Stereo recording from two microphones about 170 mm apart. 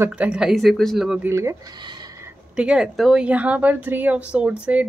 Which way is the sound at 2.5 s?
5° right (ahead or behind).